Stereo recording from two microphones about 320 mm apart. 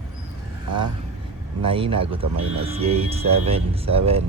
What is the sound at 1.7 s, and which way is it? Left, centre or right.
Speech, centre.